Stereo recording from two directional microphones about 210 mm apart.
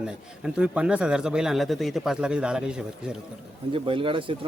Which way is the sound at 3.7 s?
25° right (ahead or behind).